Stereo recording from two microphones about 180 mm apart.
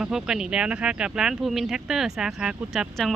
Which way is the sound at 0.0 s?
5° right (ahead or behind).